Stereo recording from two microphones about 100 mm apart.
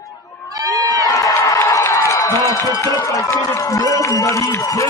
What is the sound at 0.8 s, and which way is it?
Crowd, 35° left (ahead or behind).